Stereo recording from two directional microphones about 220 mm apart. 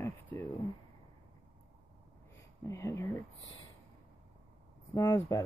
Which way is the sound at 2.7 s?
15° left (ahead or behind).